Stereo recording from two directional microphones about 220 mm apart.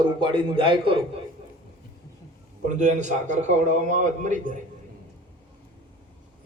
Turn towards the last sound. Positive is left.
turn(degrees=-35)  # may be behind; listen again after turning